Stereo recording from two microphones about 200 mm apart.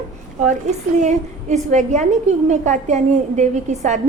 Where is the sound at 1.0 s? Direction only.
35° right (ahead or behind).